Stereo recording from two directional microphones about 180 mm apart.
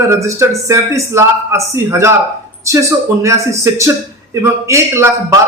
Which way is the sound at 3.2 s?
15° right (ahead or behind).